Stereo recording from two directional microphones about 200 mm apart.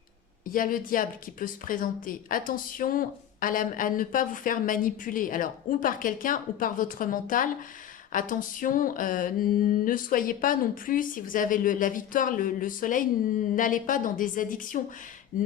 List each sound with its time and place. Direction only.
0.4 s speech: 45° left (ahead or behind)